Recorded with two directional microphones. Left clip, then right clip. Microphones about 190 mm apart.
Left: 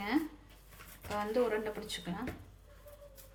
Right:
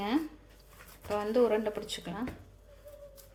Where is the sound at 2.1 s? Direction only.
30° right (ahead or behind).